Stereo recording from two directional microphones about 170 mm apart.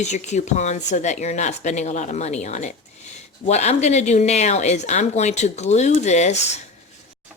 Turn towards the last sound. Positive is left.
turn(degrees=40)  # may be behind; listen again after turning